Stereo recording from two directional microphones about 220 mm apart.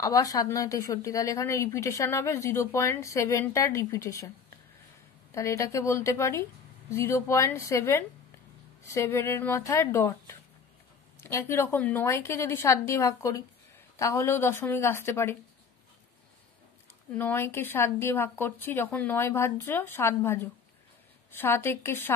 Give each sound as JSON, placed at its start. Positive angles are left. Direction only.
{"t": 0.0, "sound": "a woman's voice", "side_deg": 15}
{"t": 5.3, "sound": "a woman's voice", "side_deg": 15}
{"t": 17.2, "sound": "a woman's voice", "side_deg": 10}